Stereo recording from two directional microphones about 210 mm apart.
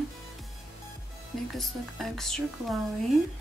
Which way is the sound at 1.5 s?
Centre (ahead or behind).